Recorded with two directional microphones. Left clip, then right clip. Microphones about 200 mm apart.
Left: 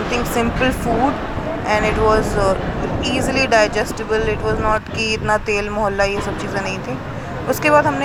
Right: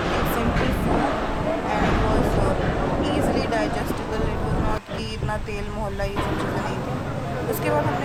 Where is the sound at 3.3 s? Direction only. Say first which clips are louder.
Left 8 dB; 30° left (ahead or behind).